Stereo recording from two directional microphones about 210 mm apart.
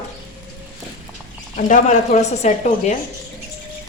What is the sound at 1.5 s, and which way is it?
Speech, 35° left (ahead or behind).